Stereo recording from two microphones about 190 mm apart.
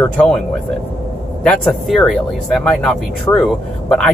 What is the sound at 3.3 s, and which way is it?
Speech, 15° left (ahead or behind).